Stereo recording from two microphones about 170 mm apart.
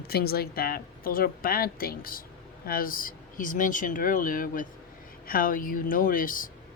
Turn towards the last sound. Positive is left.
turn(degrees=55)  # may be behind; listen again after turning